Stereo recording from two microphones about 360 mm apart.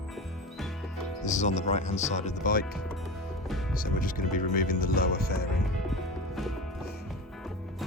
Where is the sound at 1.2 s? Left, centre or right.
Centre.